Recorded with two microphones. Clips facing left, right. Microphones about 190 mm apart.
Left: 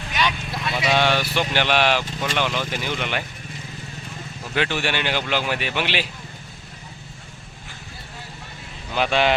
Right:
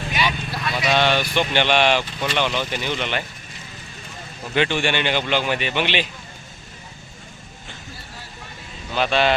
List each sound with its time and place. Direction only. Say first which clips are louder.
0.1 s clip-clop: even; 10° right (ahead or behind)
0.5 s clip-clop: even; 25° left (ahead or behind)
0.9 s a man's voice: right 1 dB; 10° left (ahead or behind)
4.5 s a man's voice: right 3 dB; 5° left (ahead or behind)
9.0 s speech: right 1 dB; 15° left (ahead or behind)